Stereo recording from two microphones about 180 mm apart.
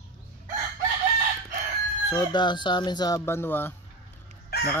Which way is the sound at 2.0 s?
25° left (ahead or behind).